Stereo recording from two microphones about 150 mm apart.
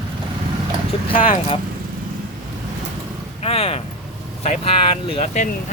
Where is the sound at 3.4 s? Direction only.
40° left (ahead or behind).